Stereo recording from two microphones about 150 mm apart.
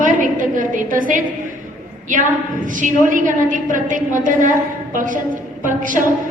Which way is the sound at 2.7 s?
60° right (ahead or behind).